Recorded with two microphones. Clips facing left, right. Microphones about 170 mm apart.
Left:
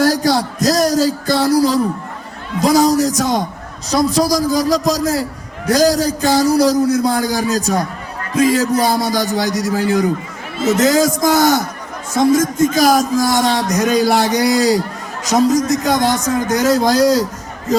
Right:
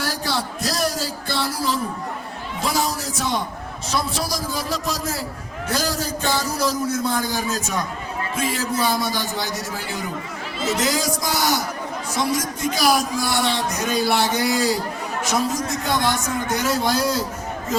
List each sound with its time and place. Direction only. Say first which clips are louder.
0.0 s a sound: left 11 dB; 40° left (ahead or behind)
3.8 s a man's voice: left 11 dB; 40° left (ahead or behind)
15.3 s a man's voice: left 11 dB; 40° left (ahead or behind)